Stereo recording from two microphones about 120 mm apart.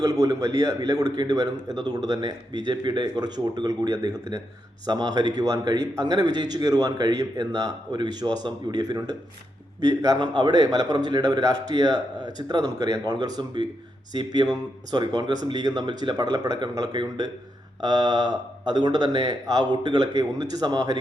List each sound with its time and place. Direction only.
0.0 s a man's voice: 30° right (ahead or behind)